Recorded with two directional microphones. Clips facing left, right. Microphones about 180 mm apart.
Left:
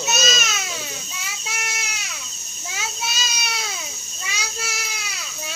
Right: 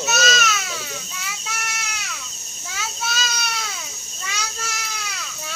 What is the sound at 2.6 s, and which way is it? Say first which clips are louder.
Child singing: right 1 dB; 15° left (ahead or behind).